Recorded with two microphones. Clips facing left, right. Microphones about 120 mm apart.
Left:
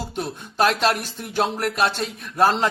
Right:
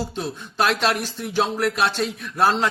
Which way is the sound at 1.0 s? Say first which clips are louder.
Right 1 dB; 50° left (ahead or behind).